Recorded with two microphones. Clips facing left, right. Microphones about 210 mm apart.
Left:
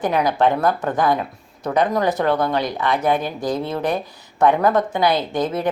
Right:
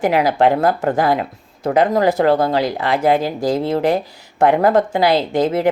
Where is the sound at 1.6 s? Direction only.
25° right (ahead or behind).